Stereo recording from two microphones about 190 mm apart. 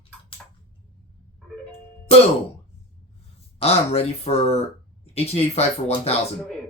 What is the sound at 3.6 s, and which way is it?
Speech, 30° left (ahead or behind).